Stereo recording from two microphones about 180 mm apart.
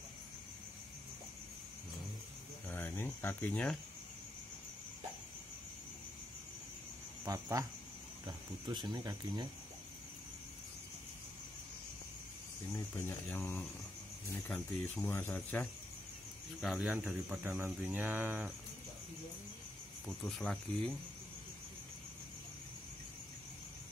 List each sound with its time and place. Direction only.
2.7 s speech: 15° left (ahead or behind)
7.2 s a man's voice: 15° right (ahead or behind)
8.8 s speech: 20° right (ahead or behind)
12.9 s speech: 10° left (ahead or behind)
16.6 s a man's voice: centre (ahead or behind)
20.2 s speech: 5° left (ahead or behind)